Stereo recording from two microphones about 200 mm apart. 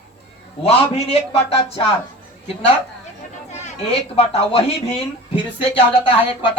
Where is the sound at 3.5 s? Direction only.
35° left (ahead or behind).